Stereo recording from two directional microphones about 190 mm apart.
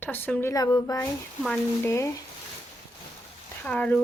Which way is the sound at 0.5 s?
20° left (ahead or behind).